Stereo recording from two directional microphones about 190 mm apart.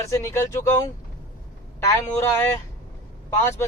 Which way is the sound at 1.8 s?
15° left (ahead or behind).